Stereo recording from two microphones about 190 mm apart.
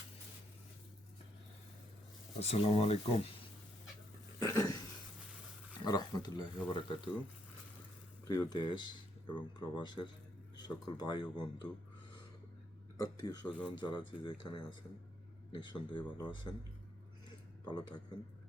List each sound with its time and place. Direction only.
2.4 s speech: 35° left (ahead or behind)
4.4 s a sound: 20° left (ahead or behind)
5.8 s speech: 20° left (ahead or behind)
8.3 s speech: 20° left (ahead or behind)
13.0 s speech: 20° left (ahead or behind)
17.2 s a sound: 20° left (ahead or behind)